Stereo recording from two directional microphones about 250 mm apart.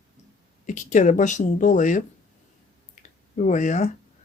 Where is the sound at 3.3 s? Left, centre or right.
Left.